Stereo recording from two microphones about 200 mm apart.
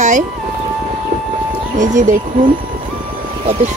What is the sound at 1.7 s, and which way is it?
Speech, 40° right (ahead or behind).